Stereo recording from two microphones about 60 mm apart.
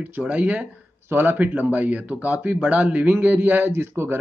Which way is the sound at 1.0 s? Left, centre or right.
Right.